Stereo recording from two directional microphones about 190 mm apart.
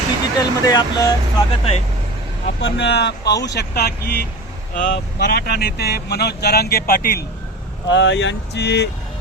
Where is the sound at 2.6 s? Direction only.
65° left (ahead or behind).